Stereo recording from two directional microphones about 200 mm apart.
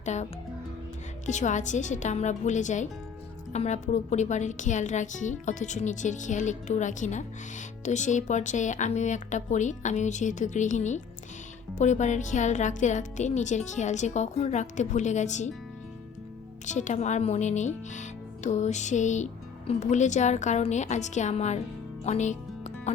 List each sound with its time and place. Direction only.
0.0 s a child's voice: 35° left (ahead or behind)
1.3 s speech: 35° left (ahead or behind)
16.6 s speech: 35° left (ahead or behind)
22.0 s music: 35° left (ahead or behind)